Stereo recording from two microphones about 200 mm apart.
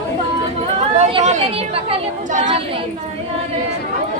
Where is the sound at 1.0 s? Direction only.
35° right (ahead or behind).